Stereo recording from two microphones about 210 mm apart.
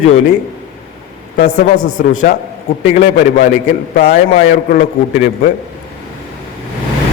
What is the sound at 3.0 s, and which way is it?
A man's voice, 45° left (ahead or behind).